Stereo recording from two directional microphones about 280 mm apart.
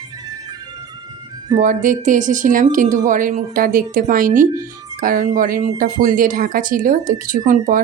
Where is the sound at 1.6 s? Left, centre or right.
Right.